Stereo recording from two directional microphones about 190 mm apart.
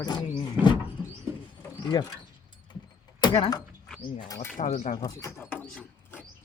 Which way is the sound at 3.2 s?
20° left (ahead or behind).